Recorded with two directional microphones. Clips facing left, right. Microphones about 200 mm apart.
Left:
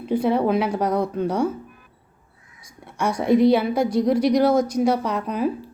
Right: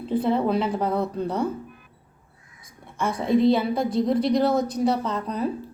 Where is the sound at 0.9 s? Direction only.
10° left (ahead or behind).